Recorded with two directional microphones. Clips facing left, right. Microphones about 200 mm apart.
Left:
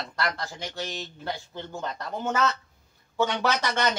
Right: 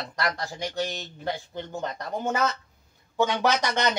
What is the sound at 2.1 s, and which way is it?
Speech, 15° right (ahead or behind).